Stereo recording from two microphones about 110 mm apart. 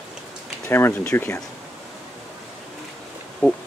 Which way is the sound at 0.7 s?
20° left (ahead or behind).